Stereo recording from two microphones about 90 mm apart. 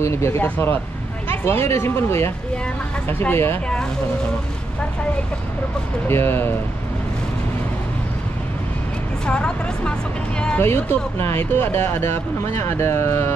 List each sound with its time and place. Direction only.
0.0 s speech: 30° left (ahead or behind)
6.0 s speech: 25° left (ahead or behind)
9.2 s speech: 10° left (ahead or behind)
10.6 s speech: 25° left (ahead or behind)